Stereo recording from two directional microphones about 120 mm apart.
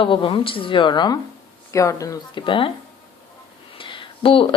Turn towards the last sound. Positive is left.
turn(degrees=45)  # may be behind; listen again after turning